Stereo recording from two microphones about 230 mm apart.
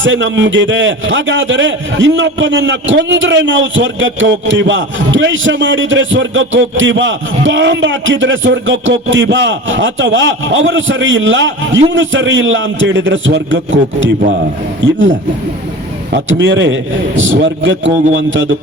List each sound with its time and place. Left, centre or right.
0.0 s a man's voice: right
16.1 s a man's voice: right